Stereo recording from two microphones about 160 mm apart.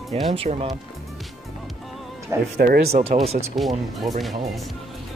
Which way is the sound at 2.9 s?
40° right (ahead or behind).